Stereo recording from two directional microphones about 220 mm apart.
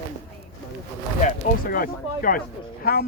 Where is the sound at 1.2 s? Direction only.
40° left (ahead or behind).